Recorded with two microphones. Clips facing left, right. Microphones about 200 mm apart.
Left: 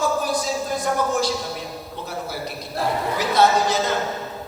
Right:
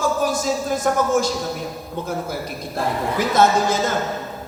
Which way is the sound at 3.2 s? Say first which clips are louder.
Right 2 dB; 50° right (ahead or behind).